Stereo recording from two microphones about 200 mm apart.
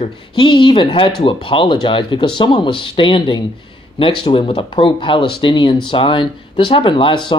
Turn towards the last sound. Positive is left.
turn(degrees=25)  # may be behind; listen again after turning